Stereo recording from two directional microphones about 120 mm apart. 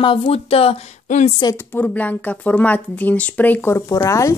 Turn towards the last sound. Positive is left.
turn(degrees=25)  # may be behind; listen again after turning